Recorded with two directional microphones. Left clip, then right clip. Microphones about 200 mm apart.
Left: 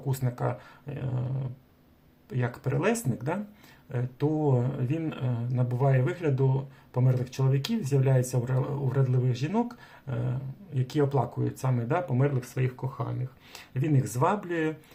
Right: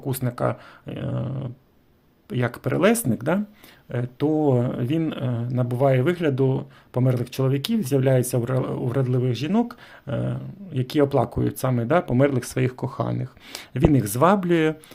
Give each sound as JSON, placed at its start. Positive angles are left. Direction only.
{"t": 0.1, "sound": "speech", "side_deg": -40}
{"t": 2.3, "sound": "speech", "side_deg": -40}